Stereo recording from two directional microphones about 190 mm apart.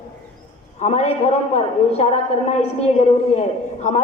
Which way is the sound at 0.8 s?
35° left (ahead or behind).